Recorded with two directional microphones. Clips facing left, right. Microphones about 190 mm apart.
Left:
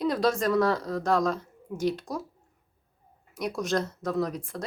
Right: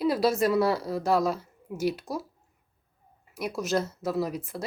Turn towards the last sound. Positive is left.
turn(degrees=-5)  # may be behind; listen again after turning